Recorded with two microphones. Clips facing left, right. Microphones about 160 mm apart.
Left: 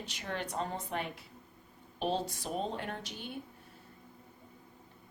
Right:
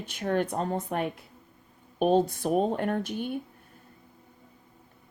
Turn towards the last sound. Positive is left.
turn(degrees=-50)  # may be behind; listen again after turning